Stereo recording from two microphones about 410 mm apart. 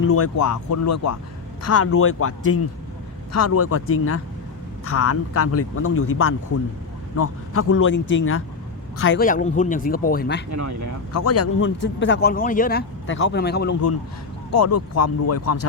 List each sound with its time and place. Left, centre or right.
0.0 s a man's voice: left
10.5 s speech: right
11.1 s a man's voice: left
14.5 s speech: left